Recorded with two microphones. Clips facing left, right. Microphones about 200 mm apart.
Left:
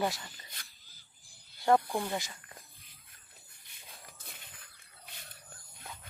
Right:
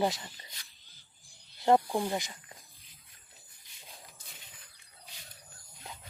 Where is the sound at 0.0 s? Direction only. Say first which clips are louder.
Right 3 dB; 20° right (ahead or behind).